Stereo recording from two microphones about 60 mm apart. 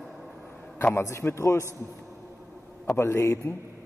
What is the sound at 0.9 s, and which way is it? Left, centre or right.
Speech, left.